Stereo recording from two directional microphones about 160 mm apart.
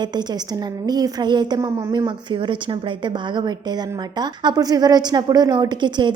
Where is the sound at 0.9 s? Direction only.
25° right (ahead or behind).